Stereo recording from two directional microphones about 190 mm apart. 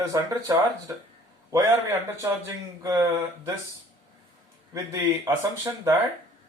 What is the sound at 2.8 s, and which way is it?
Speech, 20° right (ahead or behind).